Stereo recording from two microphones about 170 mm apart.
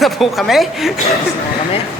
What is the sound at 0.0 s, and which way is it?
Speech, centre (ahead or behind).